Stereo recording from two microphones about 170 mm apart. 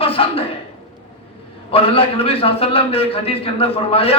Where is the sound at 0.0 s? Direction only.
35° left (ahead or behind).